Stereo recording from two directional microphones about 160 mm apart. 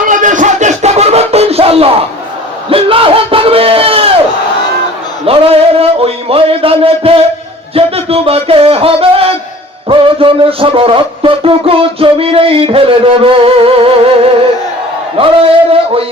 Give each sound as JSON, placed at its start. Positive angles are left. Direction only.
{"t": 0.0, "sound": "music", "side_deg": -55}
{"t": 2.6, "sound": "crowd", "side_deg": -35}
{"t": 5.2, "sound": "a man's voice", "side_deg": -35}